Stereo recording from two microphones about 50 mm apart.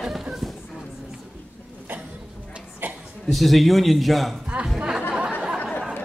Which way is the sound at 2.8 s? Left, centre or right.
Right.